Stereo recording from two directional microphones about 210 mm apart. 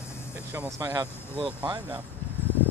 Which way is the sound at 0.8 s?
20° right (ahead or behind).